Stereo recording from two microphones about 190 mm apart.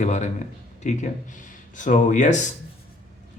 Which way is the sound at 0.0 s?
40° left (ahead or behind).